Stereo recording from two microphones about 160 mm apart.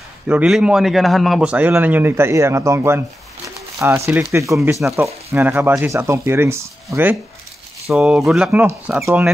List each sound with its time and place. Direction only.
0.3 s a man's voice: 5° right (ahead or behind)
7.9 s a man's voice: 5° right (ahead or behind)